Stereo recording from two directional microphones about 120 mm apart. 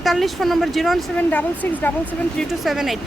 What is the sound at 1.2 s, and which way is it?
Speech, 10° left (ahead or behind).